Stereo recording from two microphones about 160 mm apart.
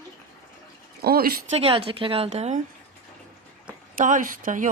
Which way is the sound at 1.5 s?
35° right (ahead or behind).